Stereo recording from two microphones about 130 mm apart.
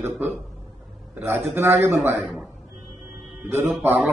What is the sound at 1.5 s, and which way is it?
Speech, 20° right (ahead or behind).